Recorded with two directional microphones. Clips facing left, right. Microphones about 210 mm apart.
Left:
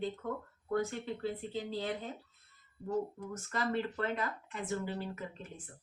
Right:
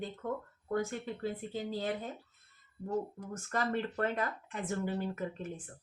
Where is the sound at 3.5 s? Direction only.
50° right (ahead or behind).